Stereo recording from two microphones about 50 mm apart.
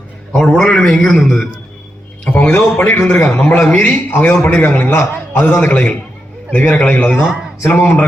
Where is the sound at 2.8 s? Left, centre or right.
Left.